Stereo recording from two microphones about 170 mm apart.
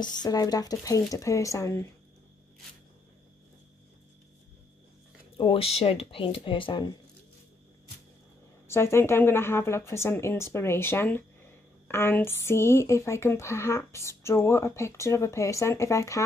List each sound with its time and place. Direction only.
0.0 s speech: 25° left (ahead or behind)
5.4 s speech: 35° left (ahead or behind)
8.6 s speech: 15° left (ahead or behind)